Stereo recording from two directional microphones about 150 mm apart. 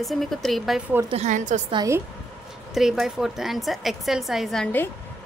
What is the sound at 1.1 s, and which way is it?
Speech, 50° right (ahead or behind).